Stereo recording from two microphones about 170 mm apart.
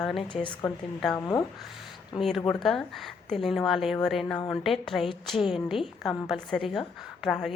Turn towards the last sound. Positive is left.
turn(degrees=0)  # may be behind; listen again after turning